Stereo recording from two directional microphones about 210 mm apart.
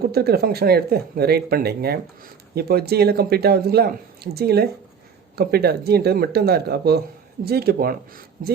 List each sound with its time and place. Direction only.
0.0 s speech: 50° right (ahead or behind)